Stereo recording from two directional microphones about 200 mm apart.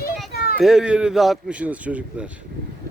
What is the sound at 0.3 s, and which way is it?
Children playing, 50° left (ahead or behind).